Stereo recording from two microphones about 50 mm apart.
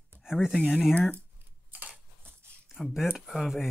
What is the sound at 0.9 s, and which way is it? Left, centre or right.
Speech, left.